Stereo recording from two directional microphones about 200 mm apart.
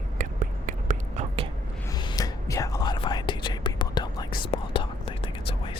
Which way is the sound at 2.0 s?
20° left (ahead or behind).